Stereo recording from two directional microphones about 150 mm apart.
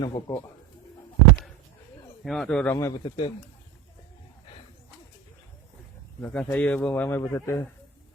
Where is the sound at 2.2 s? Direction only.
Centre (ahead or behind).